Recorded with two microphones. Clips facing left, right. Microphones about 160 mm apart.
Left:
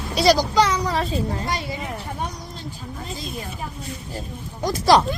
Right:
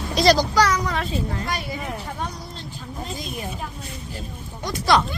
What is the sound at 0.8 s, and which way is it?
Speech, 35° left (ahead or behind).